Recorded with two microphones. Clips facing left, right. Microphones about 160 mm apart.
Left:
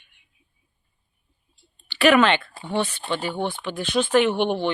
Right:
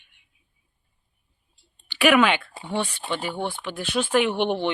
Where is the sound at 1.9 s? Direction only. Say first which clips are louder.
Left 2 dB; 10° right (ahead or behind).